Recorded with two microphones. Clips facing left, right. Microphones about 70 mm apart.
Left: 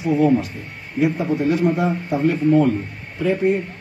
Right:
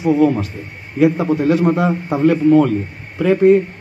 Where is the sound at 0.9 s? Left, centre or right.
Right.